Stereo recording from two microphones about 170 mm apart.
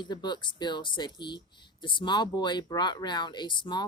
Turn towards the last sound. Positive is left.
turn(degrees=25)  # may be behind; listen again after turning